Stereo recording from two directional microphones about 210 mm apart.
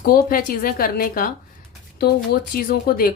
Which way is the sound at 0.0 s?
45° left (ahead or behind).